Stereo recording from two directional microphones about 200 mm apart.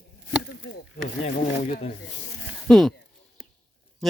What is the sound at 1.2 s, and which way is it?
Speech, 35° left (ahead or behind).